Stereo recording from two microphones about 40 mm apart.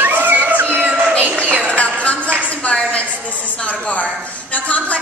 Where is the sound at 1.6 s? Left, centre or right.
Left.